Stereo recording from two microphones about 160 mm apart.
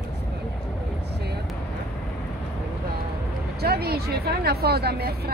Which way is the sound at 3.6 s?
80° right.